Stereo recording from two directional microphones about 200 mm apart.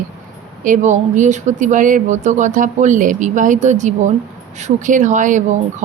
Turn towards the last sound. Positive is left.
turn(degrees=-40)  # may be behind; listen again after turning